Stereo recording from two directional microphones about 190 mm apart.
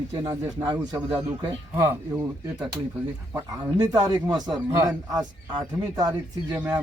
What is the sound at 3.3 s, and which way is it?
Speech, 10° right (ahead or behind).